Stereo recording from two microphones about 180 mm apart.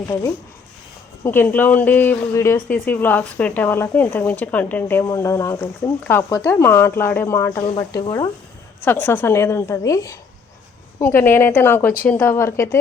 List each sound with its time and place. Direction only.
1.2 s speech: 10° left (ahead or behind)
7.6 s speech: 30° left (ahead or behind)